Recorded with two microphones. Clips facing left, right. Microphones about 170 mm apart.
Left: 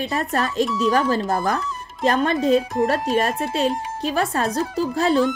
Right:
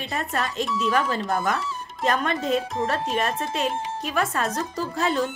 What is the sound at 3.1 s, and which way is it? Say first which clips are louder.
Speech: left 5 dB; 35° left (ahead or behind).